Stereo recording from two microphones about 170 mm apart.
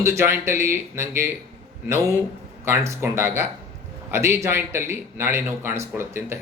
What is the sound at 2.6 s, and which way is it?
Speech, 15° right (ahead or behind).